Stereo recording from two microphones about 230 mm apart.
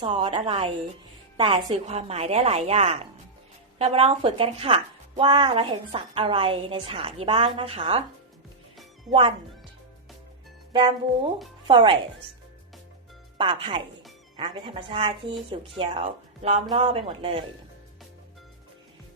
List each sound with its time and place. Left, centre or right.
0.0 s speech: right
10.7 s speech: right
13.4 s speech: right